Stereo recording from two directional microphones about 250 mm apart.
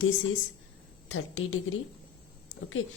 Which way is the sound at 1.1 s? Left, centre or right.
Left.